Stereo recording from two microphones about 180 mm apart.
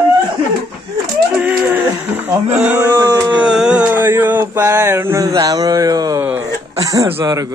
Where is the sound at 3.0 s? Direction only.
20° right (ahead or behind).